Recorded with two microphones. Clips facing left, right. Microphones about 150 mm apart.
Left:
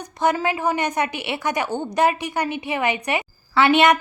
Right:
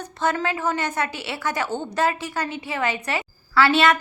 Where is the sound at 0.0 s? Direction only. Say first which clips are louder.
Left 3 dB; 15° left (ahead or behind).